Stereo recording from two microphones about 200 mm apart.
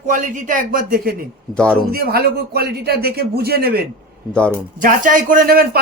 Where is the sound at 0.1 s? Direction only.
40° right (ahead or behind).